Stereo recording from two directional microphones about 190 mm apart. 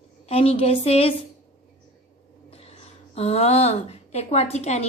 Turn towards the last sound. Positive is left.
turn(degrees=35)  # may be behind; listen again after turning